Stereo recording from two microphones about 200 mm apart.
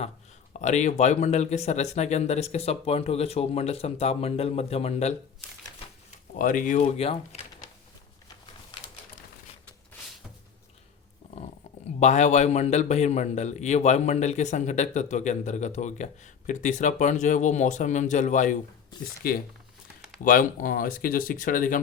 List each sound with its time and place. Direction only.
0.6 s a man's voice: 35° left (ahead or behind)
6.1 s a sound: 40° left (ahead or behind)
6.8 s speech: 30° left (ahead or behind)
11.9 s a man's voice: 35° left (ahead or behind)
19.2 s speech: 50° left (ahead or behind)